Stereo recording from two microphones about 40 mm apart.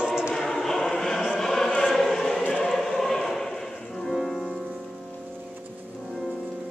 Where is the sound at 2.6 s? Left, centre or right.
Centre.